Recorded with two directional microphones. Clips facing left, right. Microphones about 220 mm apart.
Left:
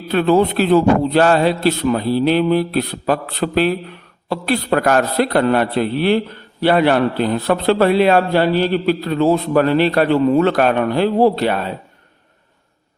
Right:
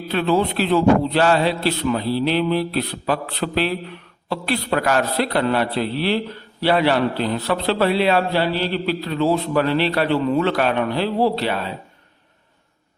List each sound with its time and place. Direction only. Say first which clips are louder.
0.1 s a man's voice: left 5 dB; 50° left (ahead or behind)